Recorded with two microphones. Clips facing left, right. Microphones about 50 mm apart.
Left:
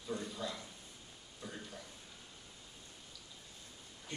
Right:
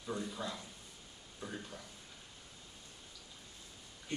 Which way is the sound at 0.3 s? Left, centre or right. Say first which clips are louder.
Even; right.